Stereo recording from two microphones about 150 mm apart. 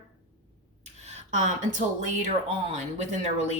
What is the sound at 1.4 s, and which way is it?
Speech, 55° right (ahead or behind).